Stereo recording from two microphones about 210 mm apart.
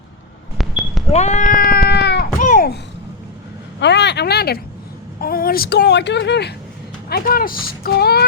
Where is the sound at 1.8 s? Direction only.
50° left (ahead or behind).